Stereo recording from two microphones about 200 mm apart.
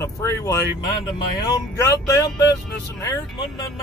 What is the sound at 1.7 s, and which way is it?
Speech, 15° left (ahead or behind).